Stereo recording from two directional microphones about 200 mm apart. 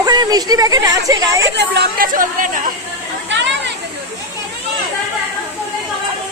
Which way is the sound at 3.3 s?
65° right (ahead or behind).